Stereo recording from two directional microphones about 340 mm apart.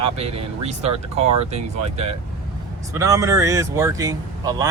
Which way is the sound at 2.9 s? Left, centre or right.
Centre.